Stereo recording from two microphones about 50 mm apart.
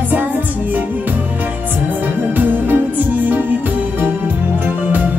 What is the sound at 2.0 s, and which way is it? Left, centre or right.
Music, right.